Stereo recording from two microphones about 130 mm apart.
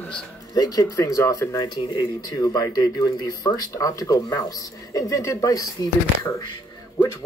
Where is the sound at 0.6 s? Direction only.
30° left (ahead or behind).